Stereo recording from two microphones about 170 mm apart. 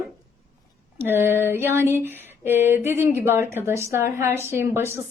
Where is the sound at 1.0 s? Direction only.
15° right (ahead or behind).